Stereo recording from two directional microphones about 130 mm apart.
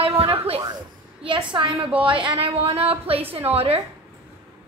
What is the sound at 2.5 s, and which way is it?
A woman's voice, 50° right (ahead or behind).